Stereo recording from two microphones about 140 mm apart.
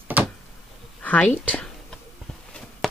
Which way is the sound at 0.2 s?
15° right (ahead or behind).